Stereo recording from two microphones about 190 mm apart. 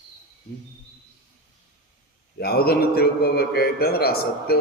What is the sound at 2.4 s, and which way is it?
A man's voice, 55° left (ahead or behind).